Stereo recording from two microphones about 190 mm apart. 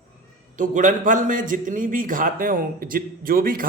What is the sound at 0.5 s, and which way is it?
A man's voice, 45° right (ahead or behind).